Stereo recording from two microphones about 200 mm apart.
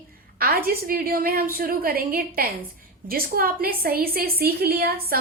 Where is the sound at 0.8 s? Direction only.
45° right (ahead or behind).